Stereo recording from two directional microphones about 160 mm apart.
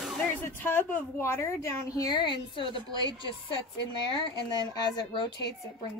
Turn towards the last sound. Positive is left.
turn(degrees=25)  # may be behind; listen again after turning